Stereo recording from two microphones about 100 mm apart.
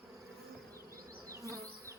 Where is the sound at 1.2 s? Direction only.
30° right (ahead or behind).